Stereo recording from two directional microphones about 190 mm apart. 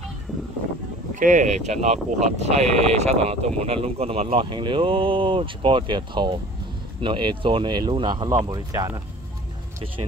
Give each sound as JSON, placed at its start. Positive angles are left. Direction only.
{"t": 1.2, "sound": "speech", "side_deg": -40}